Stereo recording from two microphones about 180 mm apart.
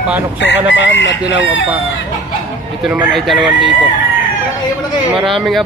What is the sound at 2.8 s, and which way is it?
Chicken, centre (ahead or behind).